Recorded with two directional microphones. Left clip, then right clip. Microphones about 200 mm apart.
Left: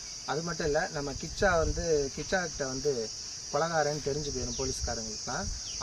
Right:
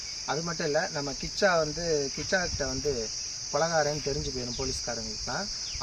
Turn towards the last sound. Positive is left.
turn(degrees=5)  # may be behind; listen again after turning